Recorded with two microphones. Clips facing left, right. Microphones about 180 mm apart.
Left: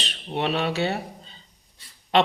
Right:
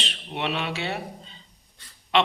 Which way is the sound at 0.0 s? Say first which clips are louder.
Left 3 dB; 40° left (ahead or behind).